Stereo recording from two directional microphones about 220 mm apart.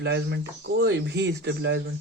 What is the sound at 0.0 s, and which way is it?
Speech, 50° right (ahead or behind).